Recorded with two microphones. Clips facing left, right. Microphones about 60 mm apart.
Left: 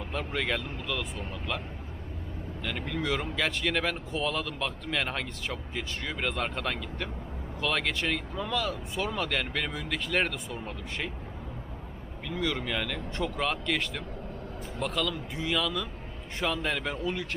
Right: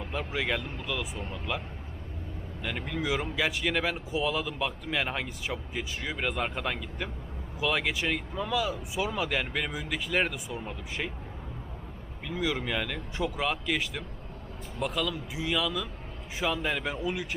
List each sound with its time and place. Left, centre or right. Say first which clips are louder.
0.0 s speech: even; centre
2.6 s speech: even; centre
12.3 s a man's voice: right 1 dB; centre